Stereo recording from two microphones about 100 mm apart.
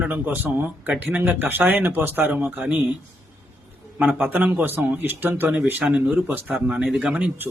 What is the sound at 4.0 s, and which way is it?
Speech, 15° right (ahead or behind).